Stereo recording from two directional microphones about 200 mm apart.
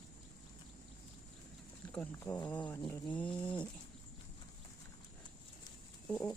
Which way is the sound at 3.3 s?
25° left (ahead or behind).